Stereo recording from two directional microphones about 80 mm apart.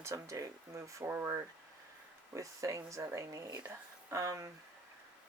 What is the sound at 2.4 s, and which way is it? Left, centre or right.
Speech, right.